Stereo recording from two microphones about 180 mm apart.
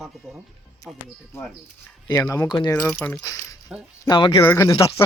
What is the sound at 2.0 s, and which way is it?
Speech, 15° left (ahead or behind).